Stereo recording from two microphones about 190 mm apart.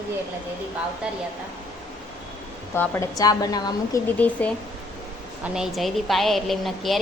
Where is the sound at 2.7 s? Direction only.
15° left (ahead or behind).